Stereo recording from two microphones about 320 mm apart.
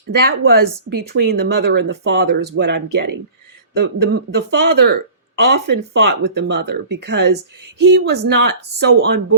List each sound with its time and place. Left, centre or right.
0.3 s speech: right
4.0 s speech: right
7.3 s speech: right
7.8 s speech: right